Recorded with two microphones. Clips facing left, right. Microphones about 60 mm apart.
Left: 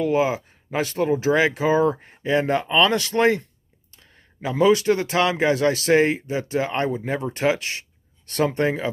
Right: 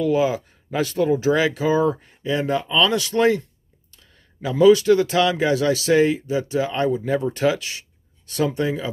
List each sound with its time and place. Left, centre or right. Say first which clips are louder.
0.0 s speech: right 1 dB; left
8.3 s speech: left 1 dB; left